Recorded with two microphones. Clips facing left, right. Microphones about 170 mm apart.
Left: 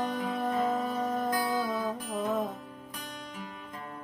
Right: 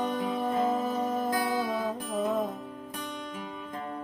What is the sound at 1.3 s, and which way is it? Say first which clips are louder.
Music: right 1 dB; 20° right (ahead or behind).